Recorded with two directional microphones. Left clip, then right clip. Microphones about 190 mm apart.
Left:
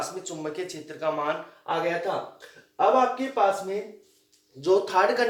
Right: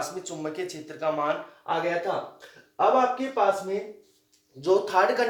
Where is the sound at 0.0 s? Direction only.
20° right (ahead or behind).